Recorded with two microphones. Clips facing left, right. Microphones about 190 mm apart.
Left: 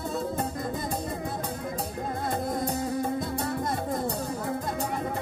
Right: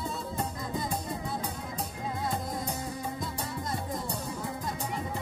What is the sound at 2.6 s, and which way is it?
Music, 60° left (ahead or behind).